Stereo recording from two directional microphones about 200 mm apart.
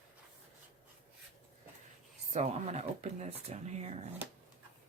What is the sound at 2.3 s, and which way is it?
Speech, 35° right (ahead or behind).